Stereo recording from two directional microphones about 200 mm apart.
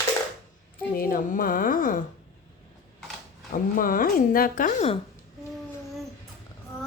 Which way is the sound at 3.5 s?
45° left (ahead or behind).